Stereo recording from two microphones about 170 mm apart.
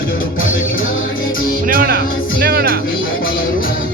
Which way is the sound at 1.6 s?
60° right (ahead or behind).